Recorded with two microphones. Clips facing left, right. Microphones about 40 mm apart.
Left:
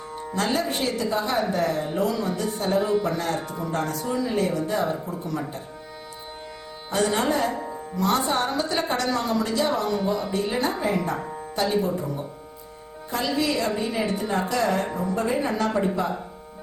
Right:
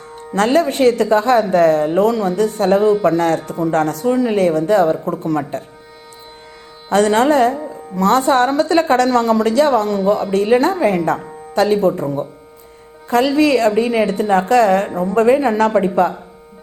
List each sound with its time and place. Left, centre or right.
0.3 s speech: right
6.9 s a woman's voice: right